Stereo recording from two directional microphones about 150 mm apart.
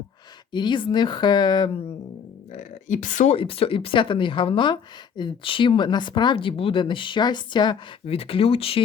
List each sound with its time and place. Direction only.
0.5 s speech: 30° left (ahead or behind)
2.5 s speech: 55° left (ahead or behind)
3.3 s speech: 40° left (ahead or behind)